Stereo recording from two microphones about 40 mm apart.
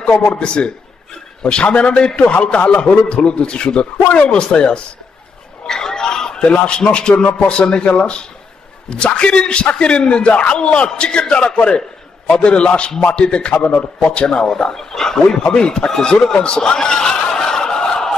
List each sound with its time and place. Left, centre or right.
0.3 s a man's voice: left
5.7 s a sound: centre
6.5 s a man's voice: left
14.5 s speech: centre
15.2 s a man's voice: left
16.3 s a sound: left